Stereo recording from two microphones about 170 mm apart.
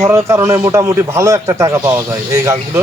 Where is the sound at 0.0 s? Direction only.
15° right (ahead or behind).